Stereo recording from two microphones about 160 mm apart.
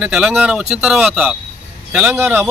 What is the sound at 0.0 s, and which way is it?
A man's voice, 5° right (ahead or behind).